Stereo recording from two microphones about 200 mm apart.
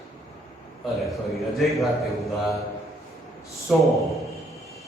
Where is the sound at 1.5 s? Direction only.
Centre (ahead or behind).